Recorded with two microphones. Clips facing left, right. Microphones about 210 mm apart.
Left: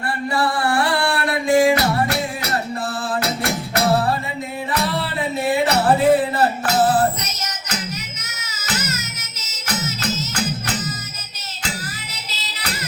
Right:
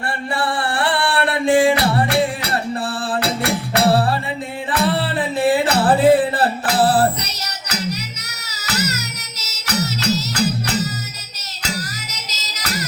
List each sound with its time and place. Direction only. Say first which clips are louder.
0.3 s music: left 3 dB; 30° right (ahead or behind)
12.1 s music: right 1 dB; 40° right (ahead or behind)